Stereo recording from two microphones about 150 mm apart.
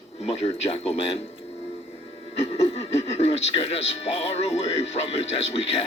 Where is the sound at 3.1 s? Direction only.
45° left (ahead or behind).